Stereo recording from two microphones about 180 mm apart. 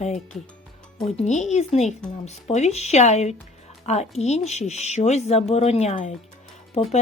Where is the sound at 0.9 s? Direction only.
40° left (ahead or behind).